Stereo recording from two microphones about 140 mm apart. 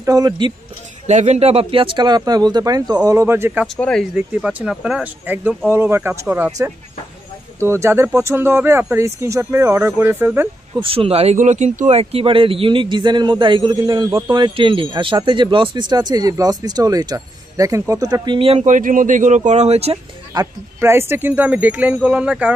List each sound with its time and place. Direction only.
0.0 s speech: 25° right (ahead or behind)
1.0 s speech: 55° right (ahead or behind); by 3.6 s 15° right (ahead or behind)
3.6 s speech: 5° left (ahead or behind)
4.5 s speech: 5° right (ahead or behind)
7.5 s speech: 20° right (ahead or behind)
10.8 s speech: 40° right (ahead or behind)
18.7 s speech: 70° right (ahead or behind); by 20.0 s 50° right (ahead or behind)
20.3 s speech: 20° right (ahead or behind)